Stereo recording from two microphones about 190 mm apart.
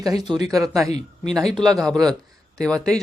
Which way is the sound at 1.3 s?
Centre (ahead or behind).